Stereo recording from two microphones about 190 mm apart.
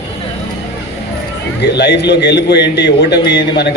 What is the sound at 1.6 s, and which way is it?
A man's voice, 65° left (ahead or behind).